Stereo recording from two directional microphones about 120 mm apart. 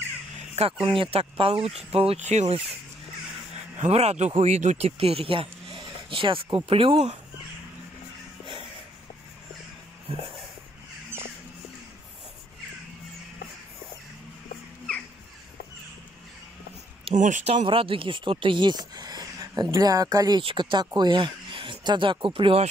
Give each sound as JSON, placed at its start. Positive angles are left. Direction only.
{"t": 0.8, "sound": "speech", "side_deg": -50}
{"t": 3.8, "sound": "speech", "side_deg": -60}
{"t": 17.1, "sound": "speech", "side_deg": -85}
{"t": 17.6, "sound": "speech", "side_deg": -45}